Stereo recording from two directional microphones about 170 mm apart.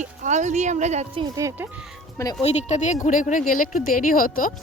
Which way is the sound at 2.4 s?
40° left (ahead or behind).